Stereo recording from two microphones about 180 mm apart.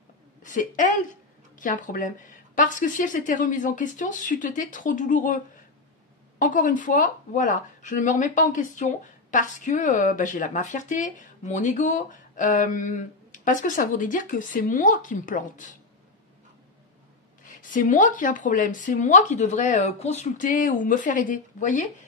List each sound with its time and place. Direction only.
0.4 s a woman's voice: 45° left (ahead or behind)
6.4 s speech: 45° left (ahead or behind)
17.5 s speech: 50° left (ahead or behind)